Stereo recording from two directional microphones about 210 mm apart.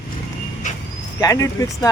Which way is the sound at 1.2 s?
15° left (ahead or behind).